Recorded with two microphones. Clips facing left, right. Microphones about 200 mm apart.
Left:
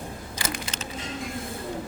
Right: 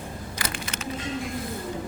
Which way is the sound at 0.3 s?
25° left (ahead or behind).